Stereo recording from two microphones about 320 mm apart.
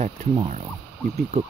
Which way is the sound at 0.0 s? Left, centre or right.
Right.